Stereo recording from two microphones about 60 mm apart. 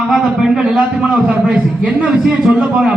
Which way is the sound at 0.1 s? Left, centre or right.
Centre.